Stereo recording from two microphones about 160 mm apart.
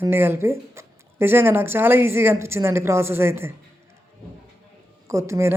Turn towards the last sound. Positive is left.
turn(degrees=-15)  # may be behind; listen again after turning